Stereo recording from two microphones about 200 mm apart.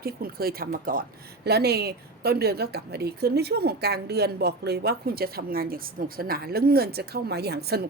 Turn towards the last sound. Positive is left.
turn(degrees=-55)  # may be behind; listen again after turning